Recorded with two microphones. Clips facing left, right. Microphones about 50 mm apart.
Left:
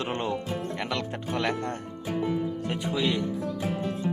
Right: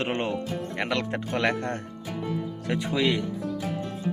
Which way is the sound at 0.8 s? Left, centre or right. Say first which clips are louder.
Right 3 dB; right.